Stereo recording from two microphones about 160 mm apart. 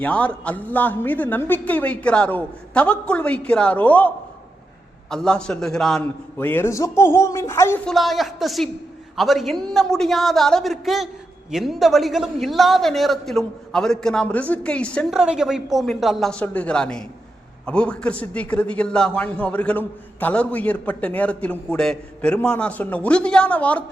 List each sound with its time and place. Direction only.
0.0 s a man's voice: 10° left (ahead or behind)
7.9 s a man's voice: centre (ahead or behind)
15.1 s a man's voice: 5° right (ahead or behind)